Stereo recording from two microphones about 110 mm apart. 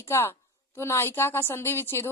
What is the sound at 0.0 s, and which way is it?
Speech, 20° left (ahead or behind).